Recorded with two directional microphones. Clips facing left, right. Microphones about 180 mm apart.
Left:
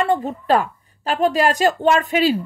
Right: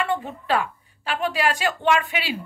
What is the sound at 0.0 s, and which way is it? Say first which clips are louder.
A woman's voice: left 6 dB; 40° left (ahead or behind).